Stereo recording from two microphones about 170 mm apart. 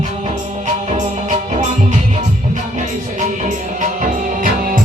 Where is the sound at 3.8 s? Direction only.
50° right (ahead or behind).